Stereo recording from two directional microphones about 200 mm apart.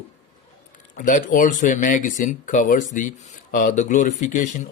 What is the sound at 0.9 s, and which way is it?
Speech, 40° left (ahead or behind).